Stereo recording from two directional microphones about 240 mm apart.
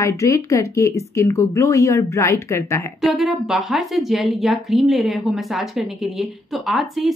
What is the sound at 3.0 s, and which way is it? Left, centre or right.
A woman's voice, centre.